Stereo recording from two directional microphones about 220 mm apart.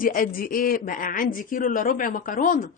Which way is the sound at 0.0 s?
40° left (ahead or behind).